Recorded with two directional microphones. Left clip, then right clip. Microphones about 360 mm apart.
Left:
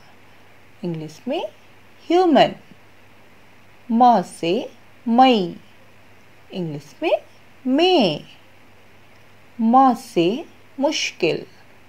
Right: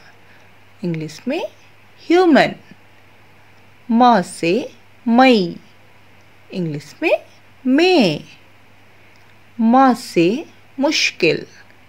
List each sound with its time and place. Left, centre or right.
0.7 s speech: centre
3.9 s speech: centre
6.5 s speech: centre
9.6 s speech: centre